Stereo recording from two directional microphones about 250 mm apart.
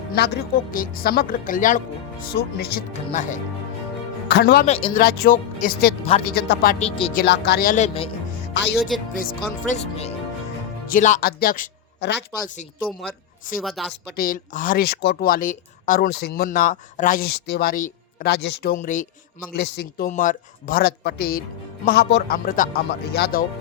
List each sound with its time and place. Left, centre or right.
0.2 s speech: left
4.6 s speech: left
4.9 s speech: left
6.3 s speech: left
7.2 s speech: left
9.1 s speech: left
13.6 s a woman's voice: centre
14.2 s speech: left